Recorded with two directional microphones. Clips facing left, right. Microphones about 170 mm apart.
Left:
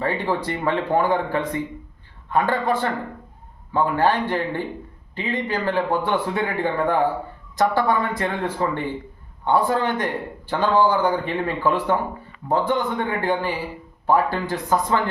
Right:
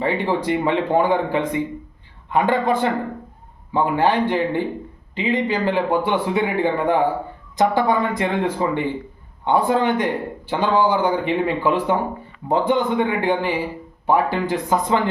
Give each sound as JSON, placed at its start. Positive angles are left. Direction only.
{"t": 0.0, "sound": "speech", "side_deg": -15}